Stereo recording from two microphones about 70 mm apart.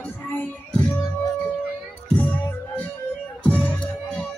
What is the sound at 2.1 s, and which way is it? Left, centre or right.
Music, left.